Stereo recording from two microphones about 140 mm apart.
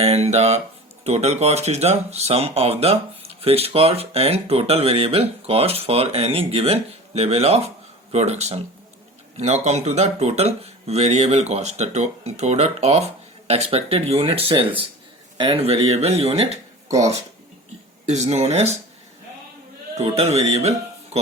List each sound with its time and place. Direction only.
0.0 s speech: 50° right (ahead or behind)
18.0 s speech: 55° right (ahead or behind)
20.0 s speech: 50° right (ahead or behind)